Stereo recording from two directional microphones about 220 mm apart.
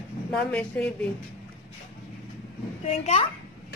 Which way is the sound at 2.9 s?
30° left (ahead or behind).